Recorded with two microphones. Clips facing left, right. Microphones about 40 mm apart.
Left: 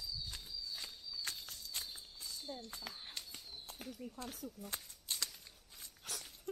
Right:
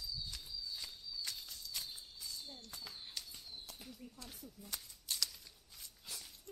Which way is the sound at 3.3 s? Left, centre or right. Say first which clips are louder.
Left 1 dB; left.